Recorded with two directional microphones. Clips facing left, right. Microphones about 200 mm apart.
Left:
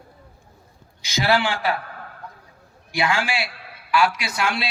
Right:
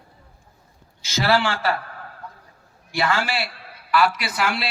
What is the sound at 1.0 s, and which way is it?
Speech, 15° left (ahead or behind).